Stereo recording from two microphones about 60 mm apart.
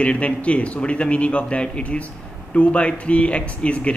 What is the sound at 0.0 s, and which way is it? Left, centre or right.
Speech, left.